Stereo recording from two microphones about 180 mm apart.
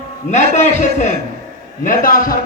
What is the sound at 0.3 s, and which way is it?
A man's voice, 40° left (ahead or behind).